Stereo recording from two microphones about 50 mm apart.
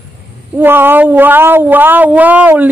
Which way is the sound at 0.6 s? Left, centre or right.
Right.